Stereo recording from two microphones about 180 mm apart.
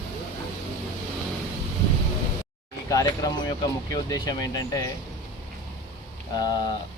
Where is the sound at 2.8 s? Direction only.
20° left (ahead or behind).